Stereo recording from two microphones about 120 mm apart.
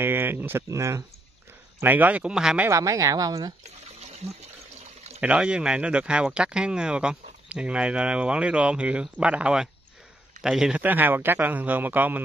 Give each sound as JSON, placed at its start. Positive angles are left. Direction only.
{"t": 0.0, "sound": "speech", "side_deg": -15}
{"t": 1.8, "sound": "speech", "side_deg": -15}
{"t": 2.7, "sound": "speech", "side_deg": -30}
{"t": 3.8, "sound": "trickle", "side_deg": -65}
{"t": 5.2, "sound": "a man's voice", "side_deg": -10}